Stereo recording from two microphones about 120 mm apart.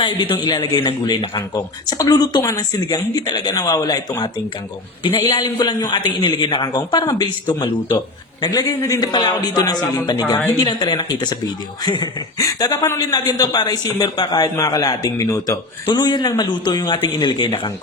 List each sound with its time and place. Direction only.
0.0 s a man's voice: 40° left (ahead or behind)
5.4 s a man's voice: 35° left (ahead or behind)
9.1 s a man's voice: 35° left (ahead or behind)
15.9 s a man's voice: 40° left (ahead or behind)